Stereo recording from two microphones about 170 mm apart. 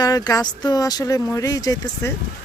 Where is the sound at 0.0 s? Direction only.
20° left (ahead or behind).